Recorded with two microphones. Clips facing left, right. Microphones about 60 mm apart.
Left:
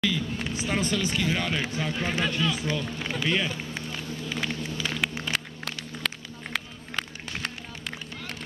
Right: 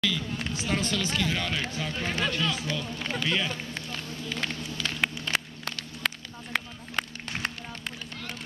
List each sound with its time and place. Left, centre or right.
0.0 s speech: centre
5.3 s run: centre